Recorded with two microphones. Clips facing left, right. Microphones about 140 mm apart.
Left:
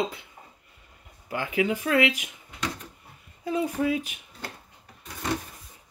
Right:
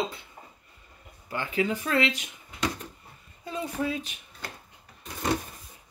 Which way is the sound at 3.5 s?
10° left (ahead or behind).